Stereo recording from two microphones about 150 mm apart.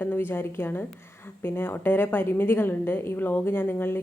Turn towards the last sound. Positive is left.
turn(degrees=15)  # may be behind; listen again after turning